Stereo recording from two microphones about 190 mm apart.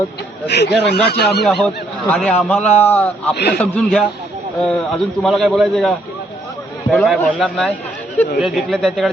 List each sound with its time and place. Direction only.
0.4 s speech: 60° left (ahead or behind)
1.5 s speech: centre (ahead or behind)
3.3 s speech: 60° left (ahead or behind)
3.6 s speech: 5° left (ahead or behind)
6.9 s speech: centre (ahead or behind)